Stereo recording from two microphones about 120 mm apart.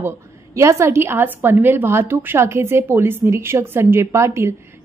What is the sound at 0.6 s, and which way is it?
A woman's voice, 25° right (ahead or behind).